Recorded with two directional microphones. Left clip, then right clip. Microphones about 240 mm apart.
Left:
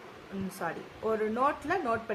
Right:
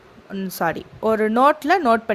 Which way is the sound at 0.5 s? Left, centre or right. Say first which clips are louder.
Right 14 dB; right.